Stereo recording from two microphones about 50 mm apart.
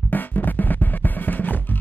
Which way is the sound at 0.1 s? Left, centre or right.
Left.